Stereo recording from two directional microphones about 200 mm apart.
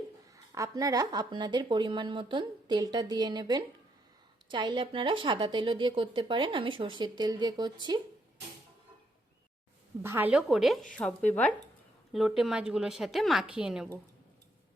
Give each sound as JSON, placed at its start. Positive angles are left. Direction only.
{"t": 0.3, "sound": "a woman's voice", "side_deg": -15}
{"t": 10.0, "sound": "a woman's voice", "side_deg": -10}